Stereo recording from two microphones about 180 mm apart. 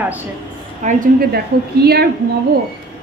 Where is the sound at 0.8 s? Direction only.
55° right (ahead or behind).